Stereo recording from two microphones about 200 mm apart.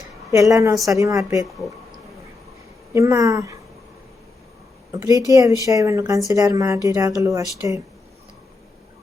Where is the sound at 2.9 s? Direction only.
15° right (ahead or behind).